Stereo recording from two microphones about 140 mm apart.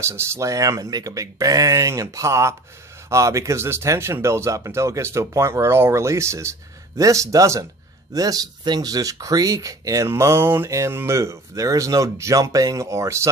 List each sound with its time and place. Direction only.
0.0 s speech: 20° right (ahead or behind)